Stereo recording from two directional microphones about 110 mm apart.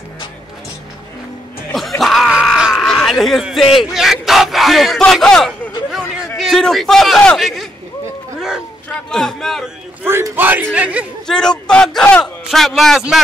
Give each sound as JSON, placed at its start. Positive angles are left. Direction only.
{"t": 1.7, "sound": "groan", "side_deg": 0}
{"t": 5.9, "sound": "a sound", "side_deg": 0}
{"t": 9.1, "sound": "a man's voice", "side_deg": 5}
{"t": 10.0, "sound": "a man's voice", "side_deg": -20}
{"t": 11.2, "sound": "a man's voice", "side_deg": 5}